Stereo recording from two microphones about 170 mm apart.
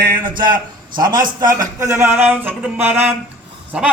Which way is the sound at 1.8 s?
15° right (ahead or behind).